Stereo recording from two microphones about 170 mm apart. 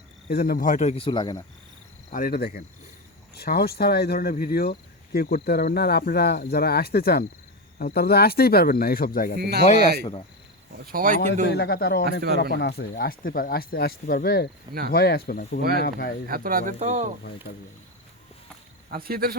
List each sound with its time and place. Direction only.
0.3 s speech: 60° left (ahead or behind); by 1.5 s 25° left (ahead or behind)
2.1 s speech: 60° left (ahead or behind)
9.4 s speech: 70° right (ahead or behind)
10.9 s speech: 50° right (ahead or behind)
11.4 s speech: 70° left (ahead or behind)
14.7 s speech: 65° right (ahead or behind)
14.9 s speech: 65° left (ahead or behind)
16.3 s speech: 55° right (ahead or behind)
18.9 s speech: 65° right (ahead or behind)